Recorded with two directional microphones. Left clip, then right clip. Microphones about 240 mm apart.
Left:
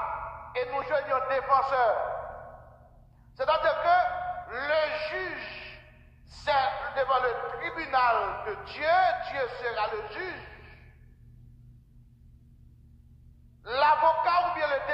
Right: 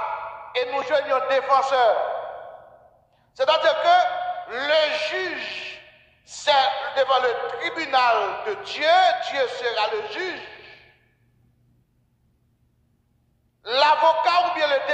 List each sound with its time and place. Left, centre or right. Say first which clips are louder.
0.0 s a sound: right 5 dB; right
3.3 s a man's voice: right 6 dB; right
13.6 s a man's voice: right 5 dB; right